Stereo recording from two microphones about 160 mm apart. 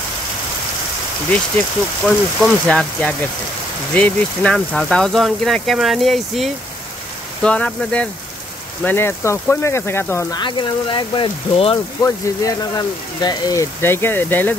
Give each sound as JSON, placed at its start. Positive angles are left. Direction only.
{"t": 1.3, "sound": "speech", "side_deg": 10}
{"t": 10.4, "sound": "speech", "side_deg": 30}
{"t": 12.0, "sound": "speech", "side_deg": 25}